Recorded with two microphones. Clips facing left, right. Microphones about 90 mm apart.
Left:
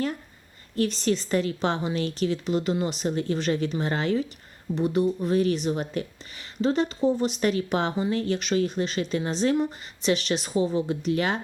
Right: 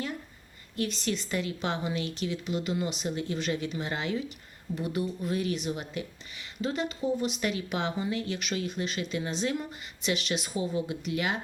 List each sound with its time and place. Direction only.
0.9 s a woman's voice: 40° left (ahead or behind)
4.7 s a woman's voice: 30° left (ahead or behind)